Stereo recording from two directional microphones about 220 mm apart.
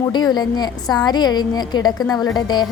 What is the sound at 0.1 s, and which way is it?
A woman's voice, 20° left (ahead or behind).